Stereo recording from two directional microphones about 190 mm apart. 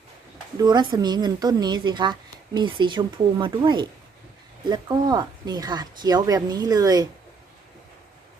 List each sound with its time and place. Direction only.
0.6 s a woman's voice: 25° right (ahead or behind)